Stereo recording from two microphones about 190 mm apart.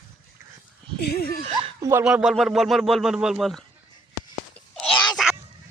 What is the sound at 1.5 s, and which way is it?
Speech, 30° right (ahead or behind).